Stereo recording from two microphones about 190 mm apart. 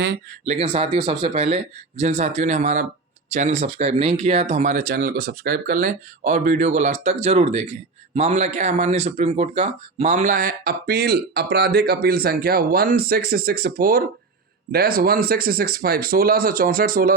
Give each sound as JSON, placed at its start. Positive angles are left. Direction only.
{"t": 0.4, "sound": "speech", "side_deg": -35}